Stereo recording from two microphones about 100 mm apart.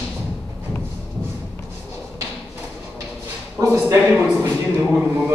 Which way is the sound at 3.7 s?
25° right (ahead or behind).